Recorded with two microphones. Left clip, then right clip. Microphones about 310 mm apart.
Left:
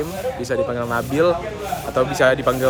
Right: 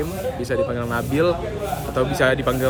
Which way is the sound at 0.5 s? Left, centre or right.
Centre.